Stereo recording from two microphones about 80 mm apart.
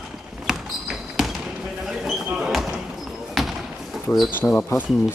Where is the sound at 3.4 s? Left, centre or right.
Centre.